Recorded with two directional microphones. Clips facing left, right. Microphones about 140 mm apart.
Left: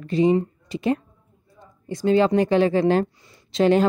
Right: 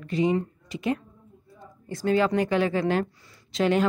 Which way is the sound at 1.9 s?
20° left (ahead or behind).